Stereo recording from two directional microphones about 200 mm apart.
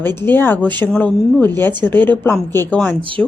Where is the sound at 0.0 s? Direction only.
10° left (ahead or behind).